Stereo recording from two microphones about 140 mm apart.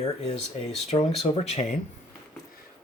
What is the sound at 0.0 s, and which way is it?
Speech, 50° left (ahead or behind).